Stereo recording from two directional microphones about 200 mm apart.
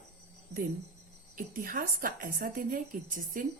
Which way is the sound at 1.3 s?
45° right (ahead or behind).